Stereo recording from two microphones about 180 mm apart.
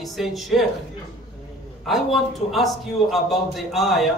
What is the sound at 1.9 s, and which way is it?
A man's voice, centre (ahead or behind).